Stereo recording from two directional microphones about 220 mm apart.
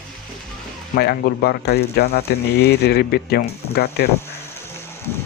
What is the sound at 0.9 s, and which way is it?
Speech, 45° left (ahead or behind).